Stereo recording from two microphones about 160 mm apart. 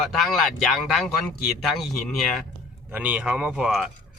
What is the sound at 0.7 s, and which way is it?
Speech, centre (ahead or behind).